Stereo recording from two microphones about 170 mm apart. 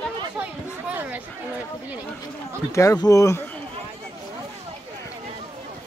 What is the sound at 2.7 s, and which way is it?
Speech, 20° left (ahead or behind).